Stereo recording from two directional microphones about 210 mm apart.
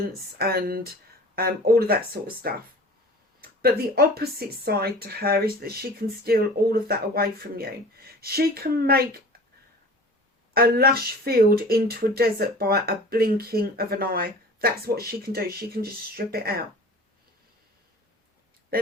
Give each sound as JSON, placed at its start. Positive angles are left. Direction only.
{"t": 0.3, "sound": "speech", "side_deg": -45}
{"t": 10.5, "sound": "speech", "side_deg": -45}